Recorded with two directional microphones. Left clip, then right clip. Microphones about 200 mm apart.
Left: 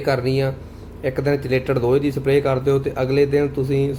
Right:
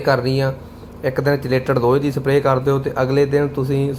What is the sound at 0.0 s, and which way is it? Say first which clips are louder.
A man's voice: right 3 dB; 5° left (ahead or behind).